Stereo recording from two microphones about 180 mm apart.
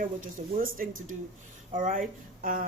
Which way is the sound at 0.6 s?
50° right (ahead or behind).